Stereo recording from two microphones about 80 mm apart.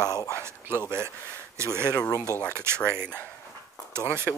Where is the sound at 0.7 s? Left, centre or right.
Right.